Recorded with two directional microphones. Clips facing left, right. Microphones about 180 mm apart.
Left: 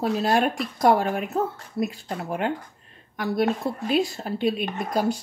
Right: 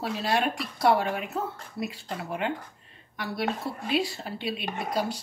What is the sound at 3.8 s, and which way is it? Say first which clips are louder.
Speech: left 4 dB; 45° left (ahead or behind).